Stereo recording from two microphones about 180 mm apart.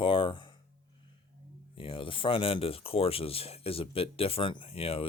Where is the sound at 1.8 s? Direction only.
30° left (ahead or behind).